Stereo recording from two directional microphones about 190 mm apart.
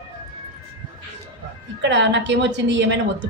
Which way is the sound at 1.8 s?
70° right (ahead or behind).